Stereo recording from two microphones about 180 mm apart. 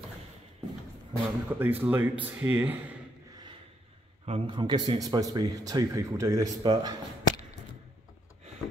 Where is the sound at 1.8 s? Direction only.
10° right (ahead or behind).